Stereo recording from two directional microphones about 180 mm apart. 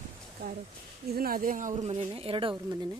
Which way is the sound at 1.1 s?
55° right (ahead or behind).